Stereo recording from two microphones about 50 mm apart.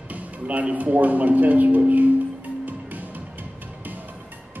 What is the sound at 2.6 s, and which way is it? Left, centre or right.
Music, right.